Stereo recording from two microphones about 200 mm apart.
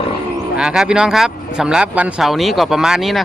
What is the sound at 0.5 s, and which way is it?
Speech, 5° right (ahead or behind).